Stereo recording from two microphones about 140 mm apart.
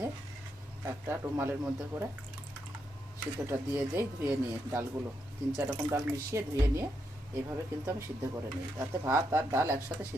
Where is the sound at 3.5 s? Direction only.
15° right (ahead or behind).